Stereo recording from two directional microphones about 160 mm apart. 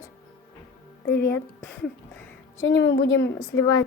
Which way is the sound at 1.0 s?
75° left (ahead or behind).